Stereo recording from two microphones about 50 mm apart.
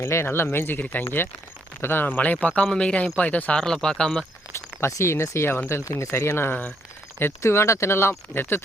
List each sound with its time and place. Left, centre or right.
0.0 s speech: left
3.5 s speech: centre
4.5 s speech: left
8.3 s speech: left